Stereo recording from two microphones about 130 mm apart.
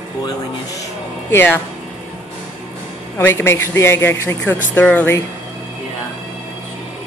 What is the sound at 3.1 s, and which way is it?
A man's voice, 20° left (ahead or behind).